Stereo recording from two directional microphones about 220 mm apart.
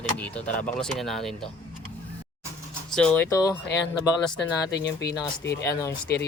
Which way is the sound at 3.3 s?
15° left (ahead or behind).